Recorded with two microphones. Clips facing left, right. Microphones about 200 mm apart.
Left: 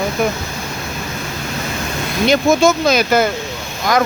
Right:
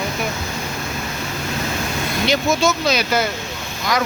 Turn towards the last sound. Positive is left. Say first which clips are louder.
# left 5 dB
turn(degrees=50)  # may be behind; listen again after turning